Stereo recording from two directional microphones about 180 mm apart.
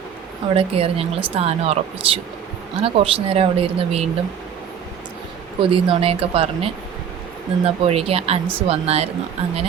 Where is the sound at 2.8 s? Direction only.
30° right (ahead or behind).